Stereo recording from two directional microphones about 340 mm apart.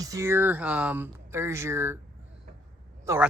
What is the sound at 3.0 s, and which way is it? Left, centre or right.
Speech, centre.